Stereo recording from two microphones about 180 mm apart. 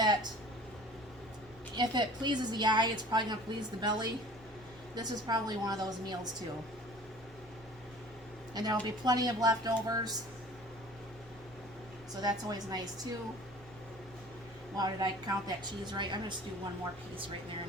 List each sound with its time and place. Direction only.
0.0 s a sound: 25° right (ahead or behind)
1.7 s a woman's voice: 25° right (ahead or behind)
8.5 s a woman's voice: 20° right (ahead or behind)
12.2 s a woman's voice: 20° right (ahead or behind)
14.8 s a woman's voice: 20° right (ahead or behind)